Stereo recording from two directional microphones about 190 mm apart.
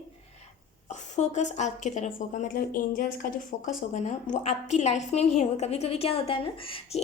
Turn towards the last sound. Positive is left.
turn(degrees=30)  # may be behind; listen again after turning